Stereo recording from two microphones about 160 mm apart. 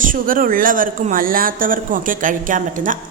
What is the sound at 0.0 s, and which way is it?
A woman's voice, 60° right (ahead or behind).